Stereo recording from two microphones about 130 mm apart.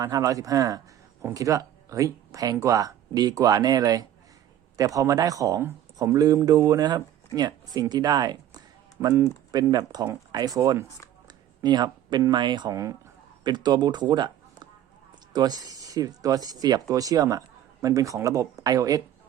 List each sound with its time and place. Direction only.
0.0 s speech: 25° right (ahead or behind)